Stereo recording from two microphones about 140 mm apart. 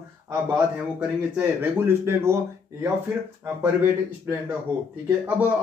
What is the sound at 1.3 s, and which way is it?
Speech, 15° right (ahead or behind).